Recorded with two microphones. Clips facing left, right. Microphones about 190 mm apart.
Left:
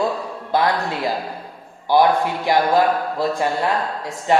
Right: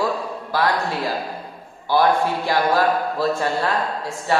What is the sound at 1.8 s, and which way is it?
A man's voice, 20° left (ahead or behind).